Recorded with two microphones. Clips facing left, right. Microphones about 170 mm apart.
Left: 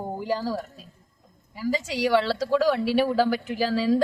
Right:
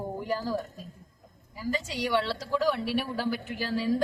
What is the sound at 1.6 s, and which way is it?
Speech, 90° left.